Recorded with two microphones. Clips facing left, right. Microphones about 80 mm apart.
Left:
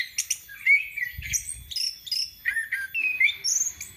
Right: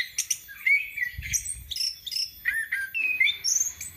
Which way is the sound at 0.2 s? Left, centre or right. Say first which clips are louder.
Even; right.